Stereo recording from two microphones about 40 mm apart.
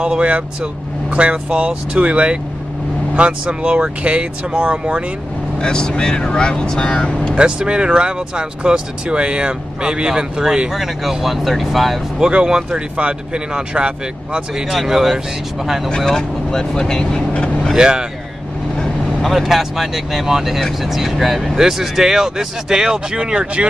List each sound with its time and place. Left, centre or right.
0.0 s speech: right
5.6 s speech: left
7.3 s speech: right
10.7 s speech: centre
12.2 s speech: right
12.4 s speech: centre
12.9 s speech: right
14.7 s speech: centre
16.4 s speech: centre
17.3 s speech: left
17.7 s speech: centre
19.2 s speech: centre; by 23.7 s right